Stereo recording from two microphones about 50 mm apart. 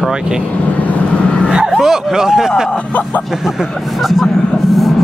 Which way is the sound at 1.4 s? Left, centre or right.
Centre.